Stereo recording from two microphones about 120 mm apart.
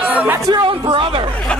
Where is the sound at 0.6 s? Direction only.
45° right (ahead or behind).